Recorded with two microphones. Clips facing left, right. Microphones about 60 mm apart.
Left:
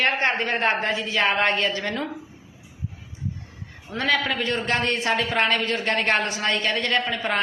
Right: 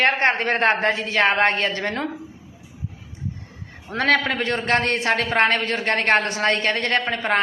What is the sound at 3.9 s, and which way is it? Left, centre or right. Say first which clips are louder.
A man's voice: right 4 dB; right.